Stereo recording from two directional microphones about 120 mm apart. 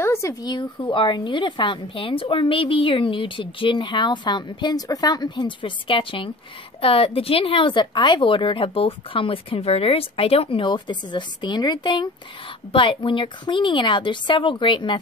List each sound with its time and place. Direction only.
0.0 s a woman's voice: 25° left (ahead or behind); by 15.0 s 40° left (ahead or behind)